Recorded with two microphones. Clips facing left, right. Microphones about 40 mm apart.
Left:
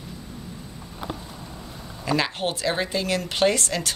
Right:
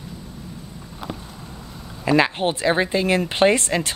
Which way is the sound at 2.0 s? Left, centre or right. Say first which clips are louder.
Right 6 dB; right.